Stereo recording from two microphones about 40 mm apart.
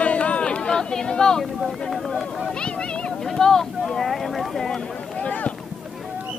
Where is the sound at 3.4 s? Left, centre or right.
Centre.